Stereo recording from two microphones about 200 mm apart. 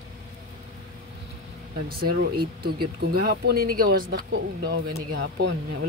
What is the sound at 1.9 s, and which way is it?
Speech, 50° right (ahead or behind).